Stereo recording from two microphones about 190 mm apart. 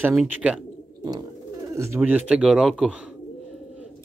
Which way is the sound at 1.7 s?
15° right (ahead or behind).